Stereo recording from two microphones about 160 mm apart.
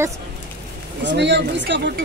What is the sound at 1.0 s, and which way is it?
Speech, 90° right.